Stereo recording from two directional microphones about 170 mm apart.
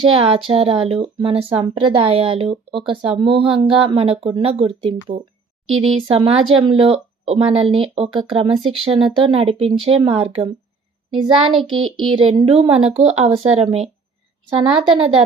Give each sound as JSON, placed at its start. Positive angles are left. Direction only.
{"t": 0.0, "sound": "speech", "side_deg": -35}
{"t": 14.5, "sound": "speech", "side_deg": -35}